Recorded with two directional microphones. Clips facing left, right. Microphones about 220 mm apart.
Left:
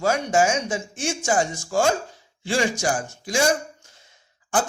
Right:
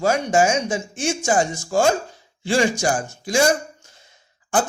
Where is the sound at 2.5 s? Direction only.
30° right (ahead or behind).